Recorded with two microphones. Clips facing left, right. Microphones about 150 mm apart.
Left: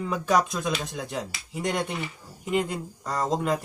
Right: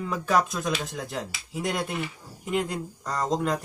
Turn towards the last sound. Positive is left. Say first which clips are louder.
# left 1 dB
turn(degrees=5)  # may be behind; listen again after turning